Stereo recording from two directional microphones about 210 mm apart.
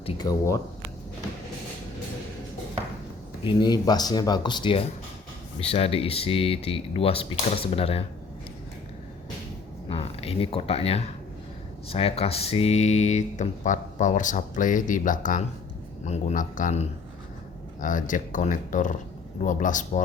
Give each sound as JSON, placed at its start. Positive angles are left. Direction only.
{"t": 0.0, "sound": "a sound", "side_deg": 25}
{"t": 0.3, "sound": "speech", "side_deg": 15}
{"t": 3.4, "sound": "speech", "side_deg": 20}
{"t": 9.9, "sound": "speech", "side_deg": 30}